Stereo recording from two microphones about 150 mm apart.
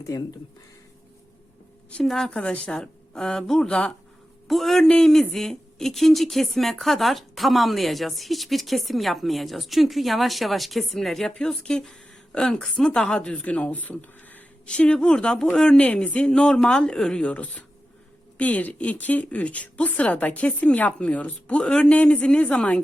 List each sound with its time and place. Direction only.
0.1 s speech: 25° left (ahead or behind)
1.9 s a woman's voice: 5° left (ahead or behind)